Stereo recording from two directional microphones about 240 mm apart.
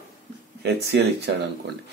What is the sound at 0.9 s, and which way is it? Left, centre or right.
Speech, right.